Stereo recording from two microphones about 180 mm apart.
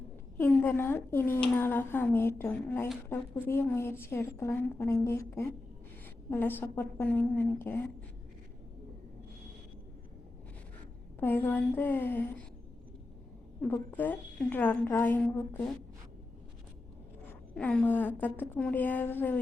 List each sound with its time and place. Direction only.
0.3 s a woman's voice: 10° left (ahead or behind)
11.2 s a woman's voice: 10° left (ahead or behind)
13.6 s a woman's voice: 10° left (ahead or behind)
17.5 s a woman's voice: 5° left (ahead or behind)